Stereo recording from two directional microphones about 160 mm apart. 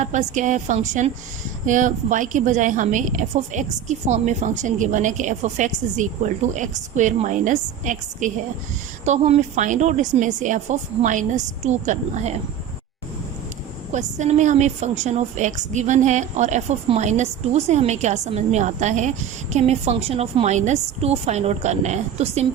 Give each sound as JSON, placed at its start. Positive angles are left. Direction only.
{"t": 0.0, "sound": "a woman's voice", "side_deg": -50}
{"t": 13.9, "sound": "a woman's voice", "side_deg": -50}